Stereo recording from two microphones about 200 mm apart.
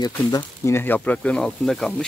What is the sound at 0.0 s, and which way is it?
Speech, 20° left (ahead or behind).